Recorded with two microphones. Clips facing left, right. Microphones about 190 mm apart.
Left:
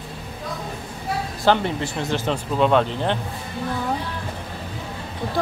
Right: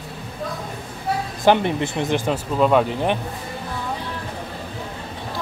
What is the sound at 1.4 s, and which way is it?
Speech, 15° right (ahead or behind).